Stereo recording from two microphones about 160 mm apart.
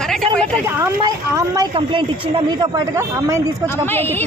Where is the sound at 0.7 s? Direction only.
15° right (ahead or behind).